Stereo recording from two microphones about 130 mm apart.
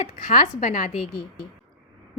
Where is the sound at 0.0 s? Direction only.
70° left (ahead or behind).